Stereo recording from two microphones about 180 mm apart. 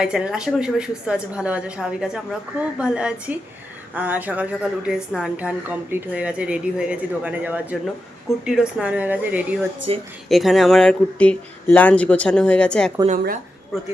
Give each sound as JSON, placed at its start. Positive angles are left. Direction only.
{"t": 0.0, "sound": "a woman's voice", "side_deg": -5}
{"t": 9.9, "sound": "a woman's voice", "side_deg": -30}
{"t": 10.2, "sound": "a woman's voice", "side_deg": 0}
{"t": 13.1, "sound": "speech", "side_deg": -50}